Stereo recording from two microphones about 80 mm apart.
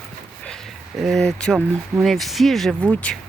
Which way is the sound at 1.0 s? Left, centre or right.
Centre.